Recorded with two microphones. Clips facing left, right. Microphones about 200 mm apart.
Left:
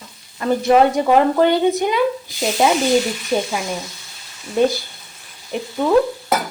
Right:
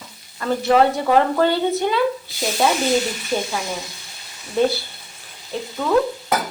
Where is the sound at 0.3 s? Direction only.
15° left (ahead or behind).